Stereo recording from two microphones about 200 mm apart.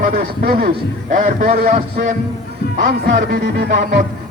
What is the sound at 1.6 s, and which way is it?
Music, 50° right (ahead or behind).